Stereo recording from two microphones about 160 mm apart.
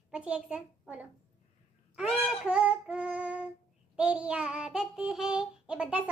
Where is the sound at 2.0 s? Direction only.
5° right (ahead or behind).